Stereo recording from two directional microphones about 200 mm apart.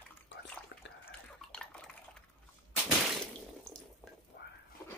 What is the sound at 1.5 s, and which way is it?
Dishes, 5° left (ahead or behind).